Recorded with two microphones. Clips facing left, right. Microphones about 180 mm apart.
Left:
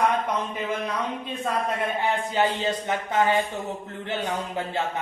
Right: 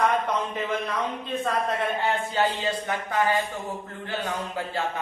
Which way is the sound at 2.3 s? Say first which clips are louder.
Left 1 dB; 20° left (ahead or behind).